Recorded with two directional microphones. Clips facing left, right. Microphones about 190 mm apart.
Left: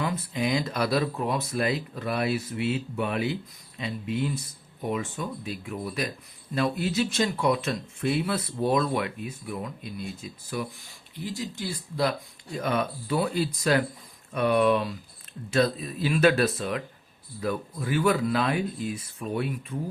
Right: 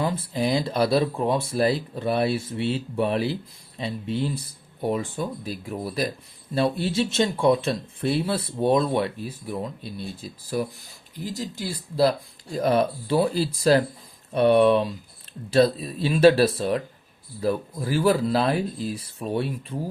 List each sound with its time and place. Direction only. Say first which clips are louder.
0.0 s speech: right 3 dB; 30° right (ahead or behind)